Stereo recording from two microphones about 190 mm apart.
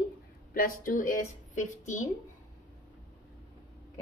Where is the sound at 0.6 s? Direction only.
50° left (ahead or behind).